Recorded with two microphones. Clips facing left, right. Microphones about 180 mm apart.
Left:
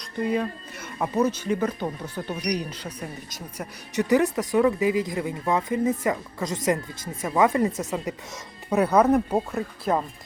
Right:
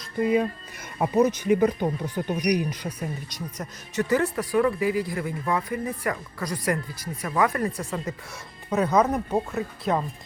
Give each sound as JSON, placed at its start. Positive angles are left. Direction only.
{"t": 0.0, "sound": "speech", "side_deg": -5}
{"t": 3.2, "sound": "speech", "side_deg": 0}
{"t": 3.9, "sound": "speech", "side_deg": 15}